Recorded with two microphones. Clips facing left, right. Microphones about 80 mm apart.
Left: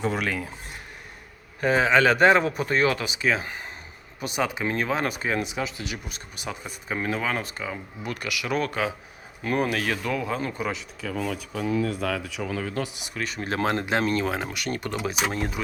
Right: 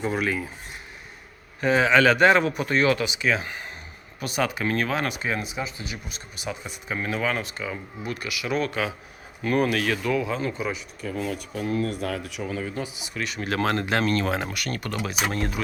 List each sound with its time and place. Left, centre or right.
0.0 s speech: left
1.6 s speech: left
4.2 s speech: left
5.4 s speech: left
8.2 s speech: left
9.4 s speech: left
10.7 s speech: left
13.1 s speech: left; by 14.3 s centre
14.3 s speech: centre
14.5 s speech: left